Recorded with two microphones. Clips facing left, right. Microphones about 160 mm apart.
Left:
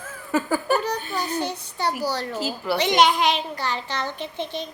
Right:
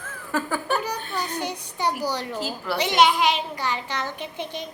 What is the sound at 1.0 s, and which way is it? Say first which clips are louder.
Speech: left 2 dB; 5° left (ahead or behind).